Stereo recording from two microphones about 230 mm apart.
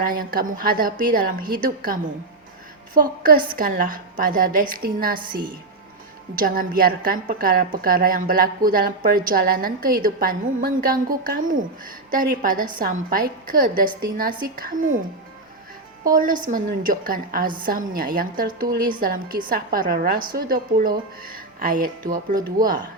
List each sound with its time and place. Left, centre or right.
0.0 s a woman's voice: right
16.0 s a woman's voice: right